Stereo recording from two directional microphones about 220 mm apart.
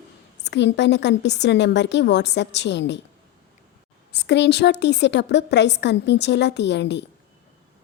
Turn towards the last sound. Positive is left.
turn(degrees=50)  # may be behind; listen again after turning